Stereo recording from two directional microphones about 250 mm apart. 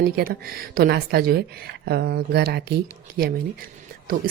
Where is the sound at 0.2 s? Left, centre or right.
Right.